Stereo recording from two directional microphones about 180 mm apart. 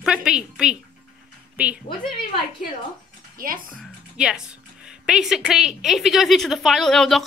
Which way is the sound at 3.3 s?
50° right (ahead or behind).